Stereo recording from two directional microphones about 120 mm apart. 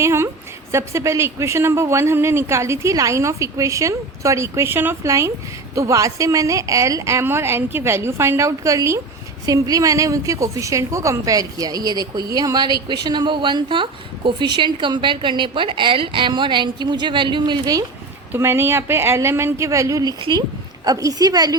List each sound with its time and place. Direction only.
0.0 s a woman's voice: 20° right (ahead or behind); by 17.7 s 40° right (ahead or behind)
18.3 s a woman's voice: 20° right (ahead or behind)